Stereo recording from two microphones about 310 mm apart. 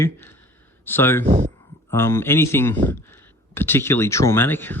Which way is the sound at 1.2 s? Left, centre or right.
Right.